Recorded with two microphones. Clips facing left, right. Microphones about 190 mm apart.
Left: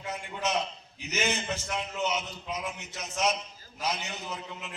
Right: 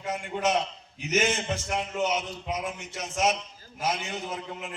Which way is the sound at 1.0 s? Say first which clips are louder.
Right 5 dB; 50° right (ahead or behind).